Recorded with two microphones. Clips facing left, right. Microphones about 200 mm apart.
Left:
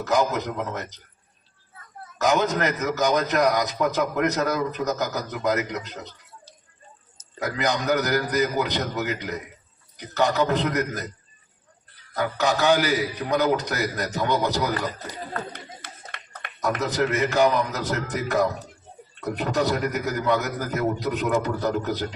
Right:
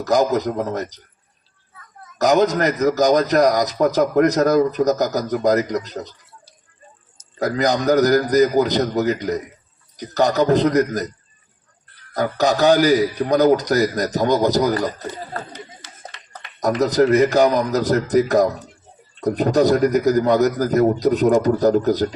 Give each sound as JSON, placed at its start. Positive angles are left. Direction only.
{"t": 0.0, "sound": "a man's voice", "side_deg": -40}
{"t": 2.1, "sound": "a man's voice", "side_deg": -35}
{"t": 7.3, "sound": "a man's voice", "side_deg": -35}
{"t": 12.1, "sound": "a man's voice", "side_deg": -40}
{"t": 15.5, "sound": "a sound", "side_deg": 55}
{"t": 16.8, "sound": "a man's voice", "side_deg": -35}